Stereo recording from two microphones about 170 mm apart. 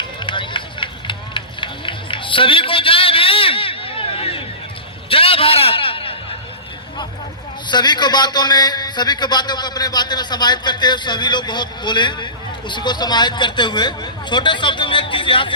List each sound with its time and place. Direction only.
0.2 s run: 30° left (ahead or behind)
5.0 s a sound: 30° left (ahead or behind)
7.7 s a man's voice: 25° left (ahead or behind)